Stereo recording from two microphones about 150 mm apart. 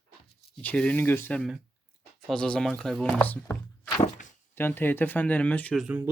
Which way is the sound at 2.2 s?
5° left (ahead or behind).